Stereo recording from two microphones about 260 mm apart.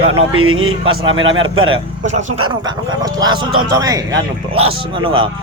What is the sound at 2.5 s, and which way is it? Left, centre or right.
Speech, centre.